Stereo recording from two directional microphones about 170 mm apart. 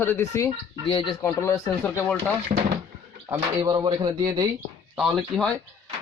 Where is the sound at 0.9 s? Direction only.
30° left (ahead or behind).